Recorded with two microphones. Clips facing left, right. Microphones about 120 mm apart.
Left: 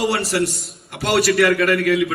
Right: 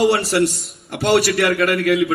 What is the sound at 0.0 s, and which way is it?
A man's voice, 25° right (ahead or behind).